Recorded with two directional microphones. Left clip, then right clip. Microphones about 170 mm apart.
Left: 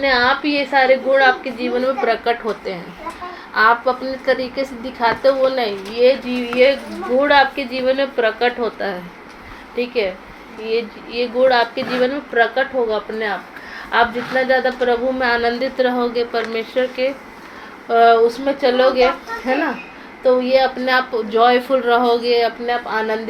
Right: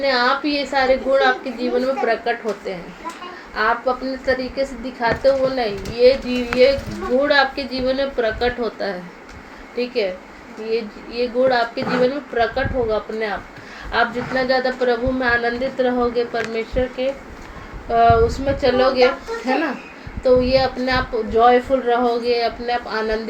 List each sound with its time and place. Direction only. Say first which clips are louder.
0.0 s a woman's voice: left 2 dB; 15° left (ahead or behind)
13.9 s a woman's voice: left 3 dB; 15° left (ahead or behind)
15.2 s a woman's voice: left 2 dB; 25° left (ahead or behind)
20.2 s a woman's voice: left 1 dB; 15° left (ahead or behind)